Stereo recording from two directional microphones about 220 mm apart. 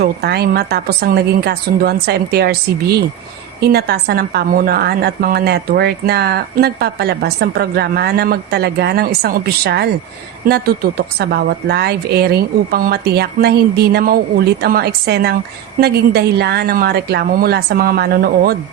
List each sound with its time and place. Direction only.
0.0 s a woman's voice: 45° right (ahead or behind)